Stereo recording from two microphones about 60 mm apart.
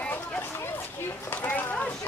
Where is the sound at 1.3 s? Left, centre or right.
Left.